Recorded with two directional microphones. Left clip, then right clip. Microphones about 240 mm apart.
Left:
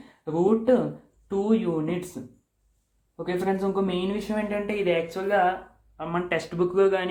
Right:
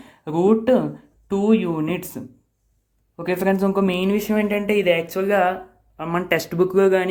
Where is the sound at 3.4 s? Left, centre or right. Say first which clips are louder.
Right 7 dB; right.